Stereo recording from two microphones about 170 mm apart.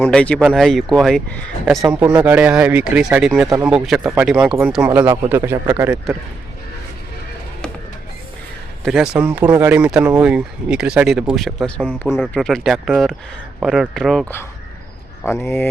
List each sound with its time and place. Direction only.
0.0 s speech: 5° left (ahead or behind)
1.9 s speech: 10° right (ahead or behind)
8.8 s speech: 5° right (ahead or behind)
15.3 s speech: 15° left (ahead or behind)